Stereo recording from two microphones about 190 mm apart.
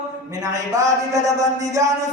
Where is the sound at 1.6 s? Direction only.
20° right (ahead or behind).